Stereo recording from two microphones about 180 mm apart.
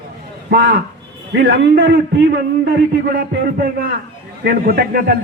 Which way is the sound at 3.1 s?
50° right (ahead or behind).